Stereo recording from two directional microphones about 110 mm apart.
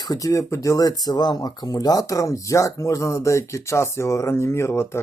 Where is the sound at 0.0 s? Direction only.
35° left (ahead or behind).